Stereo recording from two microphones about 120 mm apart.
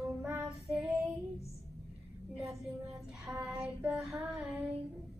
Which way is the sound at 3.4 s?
25° right (ahead or behind).